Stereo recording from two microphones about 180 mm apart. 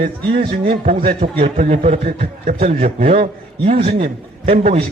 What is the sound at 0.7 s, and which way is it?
A man's voice, 45° right (ahead or behind).